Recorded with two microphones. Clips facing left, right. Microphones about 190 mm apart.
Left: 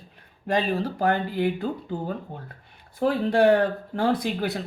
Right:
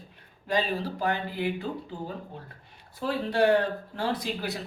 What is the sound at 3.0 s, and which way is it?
Speech, 55° left (ahead or behind).